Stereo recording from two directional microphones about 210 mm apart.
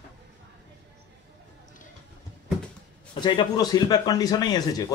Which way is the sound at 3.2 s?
20° left (ahead or behind).